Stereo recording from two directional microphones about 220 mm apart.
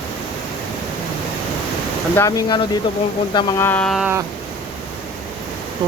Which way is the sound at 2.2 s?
15° left (ahead or behind).